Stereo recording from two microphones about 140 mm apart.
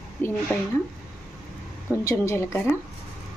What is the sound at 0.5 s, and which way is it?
Speech, 15° left (ahead or behind).